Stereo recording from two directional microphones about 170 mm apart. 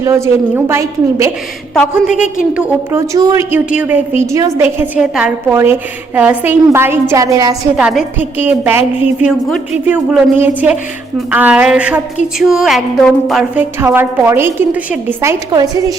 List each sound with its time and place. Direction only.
0.0 s a woman's voice: 15° right (ahead or behind)
1.7 s a woman's voice: centre (ahead or behind)
3.1 s a woman's voice: 20° right (ahead or behind)
7.8 s a woman's voice: 5° right (ahead or behind)
13.6 s a woman's voice: 10° right (ahead or behind)